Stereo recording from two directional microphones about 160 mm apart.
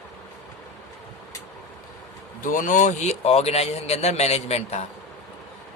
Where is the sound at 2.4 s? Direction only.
55° left (ahead or behind).